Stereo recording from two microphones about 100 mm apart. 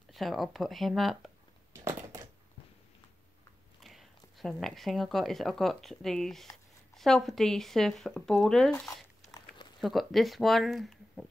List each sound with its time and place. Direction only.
0.1 s speech: centre (ahead or behind)
1.7 s a sound: 25° right (ahead or behind)
3.8 s speech: centre (ahead or behind)
9.8 s speech: centre (ahead or behind)